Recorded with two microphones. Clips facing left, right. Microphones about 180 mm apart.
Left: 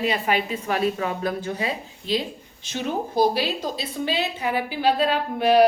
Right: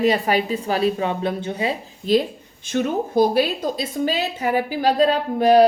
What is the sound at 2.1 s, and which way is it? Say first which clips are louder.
A woman's voice: right 7 dB; 45° right (ahead or behind).